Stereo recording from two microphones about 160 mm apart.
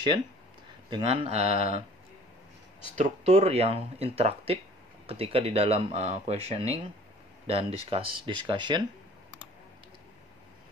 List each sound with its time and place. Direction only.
1.0 s speech: 40° right (ahead or behind)
3.0 s speech: 40° right (ahead or behind)